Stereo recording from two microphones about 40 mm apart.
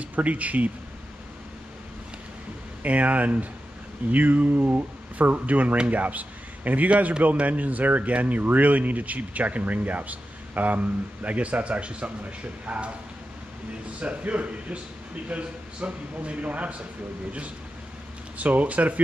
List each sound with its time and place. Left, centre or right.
0.0 s speech: right
2.8 s a man's voice: right
13.9 s speech: right
18.4 s speech: right